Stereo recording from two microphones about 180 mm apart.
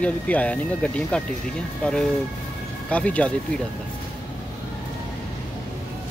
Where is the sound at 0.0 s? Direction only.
5° left (ahead or behind).